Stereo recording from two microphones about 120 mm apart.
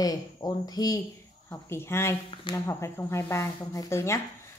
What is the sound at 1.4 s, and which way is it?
Speech, 20° left (ahead or behind).